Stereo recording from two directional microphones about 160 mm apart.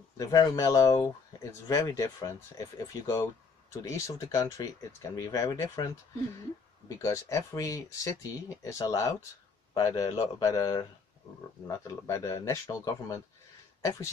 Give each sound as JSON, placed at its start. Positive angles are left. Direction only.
{"t": 0.2, "sound": "speech", "side_deg": 25}
{"t": 7.0, "sound": "speech", "side_deg": 20}